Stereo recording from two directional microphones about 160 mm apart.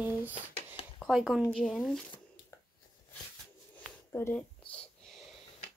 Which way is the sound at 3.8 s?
10° left (ahead or behind).